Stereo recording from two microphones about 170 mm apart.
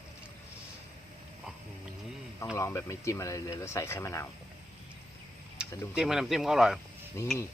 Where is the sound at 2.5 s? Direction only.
15° left (ahead or behind).